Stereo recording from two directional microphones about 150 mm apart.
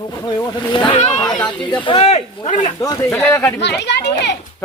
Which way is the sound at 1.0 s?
50° left (ahead or behind).